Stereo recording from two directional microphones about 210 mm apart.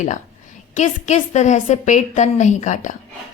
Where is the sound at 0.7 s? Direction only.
35° left (ahead or behind).